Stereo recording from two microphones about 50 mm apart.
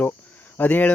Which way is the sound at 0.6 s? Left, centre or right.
Left.